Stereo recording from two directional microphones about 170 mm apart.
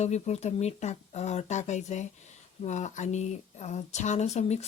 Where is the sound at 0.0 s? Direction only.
40° left (ahead or behind).